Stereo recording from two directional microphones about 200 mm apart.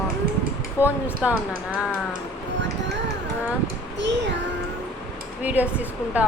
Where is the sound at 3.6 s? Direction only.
60° right (ahead or behind).